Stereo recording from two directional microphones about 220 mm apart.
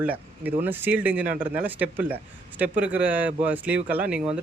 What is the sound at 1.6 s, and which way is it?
Speech, 10° right (ahead or behind).